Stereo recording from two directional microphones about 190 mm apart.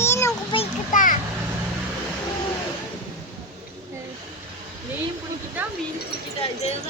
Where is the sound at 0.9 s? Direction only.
45° left (ahead or behind).